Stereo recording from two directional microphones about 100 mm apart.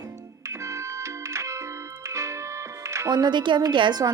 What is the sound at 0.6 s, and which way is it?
Organ, 30° right (ahead or behind).